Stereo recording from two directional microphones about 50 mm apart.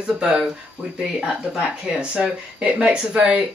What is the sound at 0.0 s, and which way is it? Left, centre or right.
Speech, right.